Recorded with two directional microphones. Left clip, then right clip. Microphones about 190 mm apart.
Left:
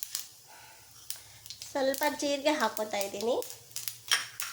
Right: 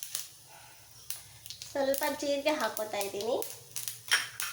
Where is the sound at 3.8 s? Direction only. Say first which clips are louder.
Left 1 dB; centre (ahead or behind).